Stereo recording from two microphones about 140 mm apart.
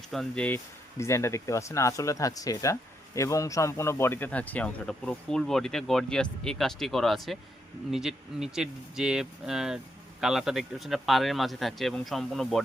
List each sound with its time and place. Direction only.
0.1 s speech: 5° left (ahead or behind)